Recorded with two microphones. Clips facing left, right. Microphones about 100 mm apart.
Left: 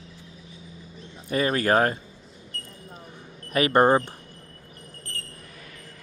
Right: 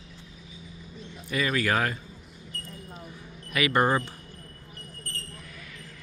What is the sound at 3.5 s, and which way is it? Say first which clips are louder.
Speech: left 5 dB; 40° left (ahead or behind).